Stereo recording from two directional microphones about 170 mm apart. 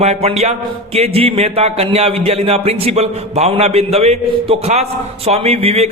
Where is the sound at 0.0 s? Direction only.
40° right (ahead or behind).